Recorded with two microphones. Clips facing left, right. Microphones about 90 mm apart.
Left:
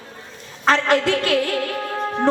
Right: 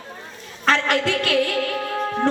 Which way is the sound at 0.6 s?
20° left (ahead or behind).